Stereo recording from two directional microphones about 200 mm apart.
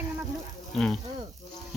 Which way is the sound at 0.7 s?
Centre (ahead or behind).